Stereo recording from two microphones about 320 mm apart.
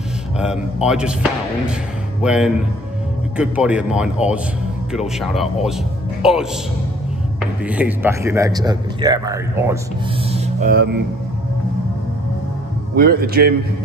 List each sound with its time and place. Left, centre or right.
0.4 s speech: centre
10.2 s speech: centre
12.9 s a man's voice: right